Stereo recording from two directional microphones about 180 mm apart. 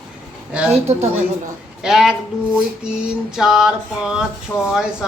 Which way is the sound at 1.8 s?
5° right (ahead or behind).